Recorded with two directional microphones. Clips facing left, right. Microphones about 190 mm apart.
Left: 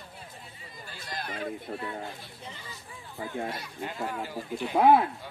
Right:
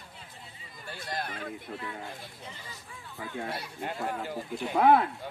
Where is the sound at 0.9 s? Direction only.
55° right (ahead or behind).